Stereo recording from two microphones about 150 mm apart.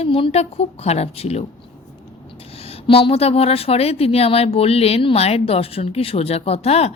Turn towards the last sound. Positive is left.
turn(degrees=45)  # may be behind; listen again after turning